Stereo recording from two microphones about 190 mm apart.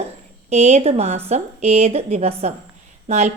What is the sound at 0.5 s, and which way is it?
A woman's voice, 35° right (ahead or behind).